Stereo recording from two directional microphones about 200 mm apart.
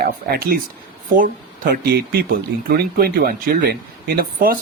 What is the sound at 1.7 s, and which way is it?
Speech, 45° right (ahead or behind).